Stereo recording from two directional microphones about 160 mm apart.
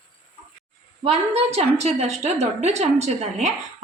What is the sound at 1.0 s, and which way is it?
A woman's voice, 40° right (ahead or behind).